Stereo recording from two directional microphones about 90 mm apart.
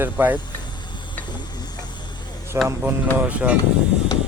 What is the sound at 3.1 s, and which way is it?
Speech, 15° right (ahead or behind).